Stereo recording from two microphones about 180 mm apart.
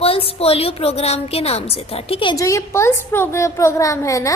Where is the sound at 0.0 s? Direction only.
30° left (ahead or behind).